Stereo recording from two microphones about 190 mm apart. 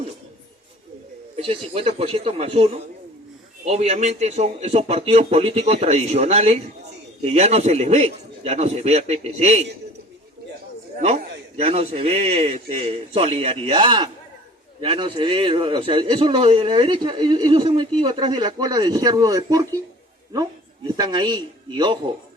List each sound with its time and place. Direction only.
1.4 s a man's voice: 30° right (ahead or behind)
11.5 s a man's voice: 30° right (ahead or behind)
20.9 s a man's voice: 25° right (ahead or behind)